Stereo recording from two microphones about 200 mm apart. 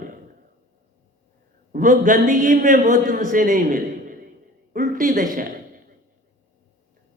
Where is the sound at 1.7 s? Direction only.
40° right (ahead or behind).